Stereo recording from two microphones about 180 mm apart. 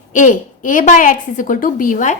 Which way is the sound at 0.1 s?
45° left (ahead or behind).